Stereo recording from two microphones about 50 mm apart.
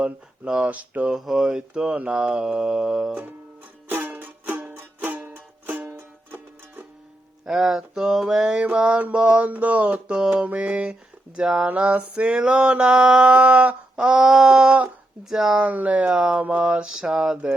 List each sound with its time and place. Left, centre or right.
0.4 s mantra: centre
0.7 s a sound: right
1.2 s mantra: centre
1.5 s mantra: centre
3.8 s music: right
7.4 s mantra: centre
11.6 s mantra: right; by 15.6 s centre
15.6 s mantra: right; by 17.3 s centre